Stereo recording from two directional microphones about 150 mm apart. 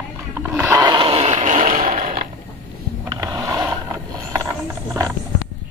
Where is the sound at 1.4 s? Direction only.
60° right (ahead or behind).